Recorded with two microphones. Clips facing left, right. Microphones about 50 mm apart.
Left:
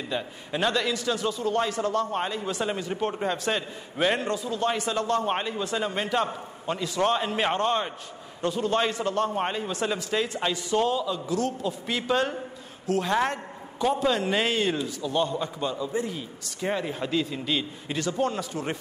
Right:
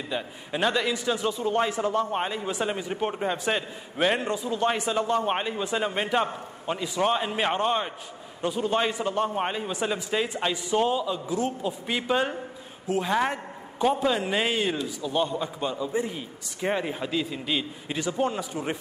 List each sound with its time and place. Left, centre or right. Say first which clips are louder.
0.1 s a man's voice: even; centre
13.1 s a man's voice: even; centre
17.0 s a man's voice: left 1 dB; centre